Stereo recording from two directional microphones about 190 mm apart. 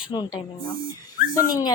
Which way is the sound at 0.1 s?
20° left (ahead or behind).